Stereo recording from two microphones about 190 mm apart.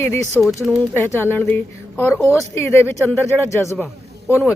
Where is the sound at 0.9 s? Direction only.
10° left (ahead or behind).